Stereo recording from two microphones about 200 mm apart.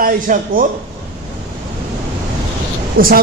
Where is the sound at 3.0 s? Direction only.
45° right (ahead or behind).